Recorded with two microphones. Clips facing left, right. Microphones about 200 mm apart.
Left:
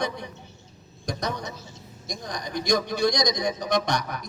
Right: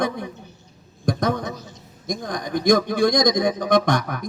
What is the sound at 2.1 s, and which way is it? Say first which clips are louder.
A man's voice: right 7 dB; 50° right (ahead or behind).